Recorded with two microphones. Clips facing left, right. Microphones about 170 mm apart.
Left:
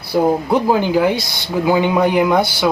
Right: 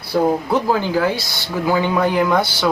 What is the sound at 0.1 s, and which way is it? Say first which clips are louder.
Speech: left 2 dB; 10° left (ahead or behind).